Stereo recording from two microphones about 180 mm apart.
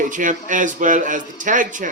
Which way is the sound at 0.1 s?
45° right (ahead or behind).